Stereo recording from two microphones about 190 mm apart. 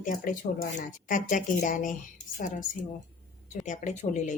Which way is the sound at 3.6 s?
40° left (ahead or behind).